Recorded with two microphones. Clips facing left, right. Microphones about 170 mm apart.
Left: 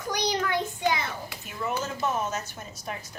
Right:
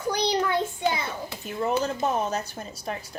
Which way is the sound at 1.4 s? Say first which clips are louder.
Right 6 dB; 35° right (ahead or behind).